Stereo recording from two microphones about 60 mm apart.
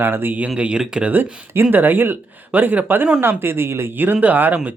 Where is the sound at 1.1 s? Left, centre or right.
Right.